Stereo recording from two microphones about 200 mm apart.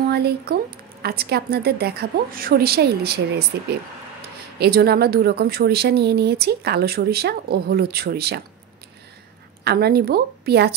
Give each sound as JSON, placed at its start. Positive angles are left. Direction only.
{"t": 0.1, "sound": "speech", "side_deg": -55}
{"t": 4.6, "sound": "speech", "side_deg": -50}
{"t": 9.7, "sound": "speech", "side_deg": -50}